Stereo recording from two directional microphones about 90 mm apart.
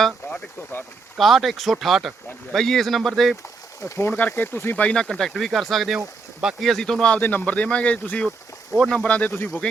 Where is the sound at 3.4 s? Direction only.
35° left (ahead or behind).